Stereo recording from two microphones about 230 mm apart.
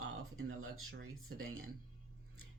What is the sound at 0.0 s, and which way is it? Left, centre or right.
Speech, right.